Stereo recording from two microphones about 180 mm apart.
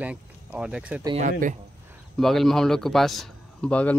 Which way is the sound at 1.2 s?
45° right (ahead or behind).